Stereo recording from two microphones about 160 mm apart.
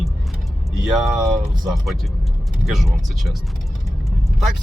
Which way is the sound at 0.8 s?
Centre (ahead or behind).